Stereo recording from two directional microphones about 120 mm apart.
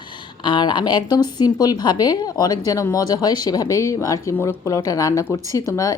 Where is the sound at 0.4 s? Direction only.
40° left (ahead or behind).